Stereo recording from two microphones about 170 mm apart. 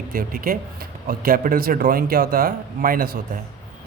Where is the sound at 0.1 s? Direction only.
55° right (ahead or behind).